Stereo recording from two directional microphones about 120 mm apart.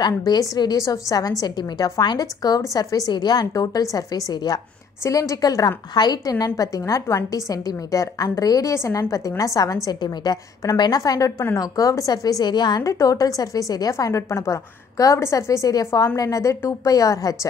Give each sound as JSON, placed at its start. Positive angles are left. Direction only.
{"t": 0.0, "sound": "a woman's voice", "side_deg": 35}